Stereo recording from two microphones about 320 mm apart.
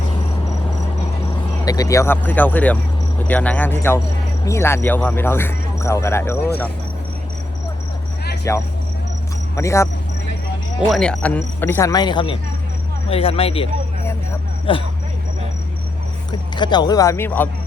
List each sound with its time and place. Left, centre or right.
1.6 s speech: centre
8.5 s speech: centre
14.7 s speech: centre
16.3 s speech: centre